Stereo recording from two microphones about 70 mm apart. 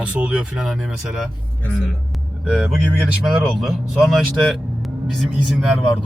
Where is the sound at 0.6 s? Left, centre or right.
Centre.